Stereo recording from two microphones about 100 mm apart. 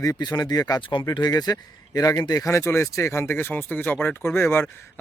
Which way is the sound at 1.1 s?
40° left (ahead or behind).